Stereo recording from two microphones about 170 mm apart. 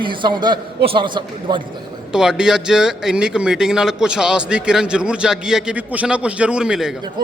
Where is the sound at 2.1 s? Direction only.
5° right (ahead or behind).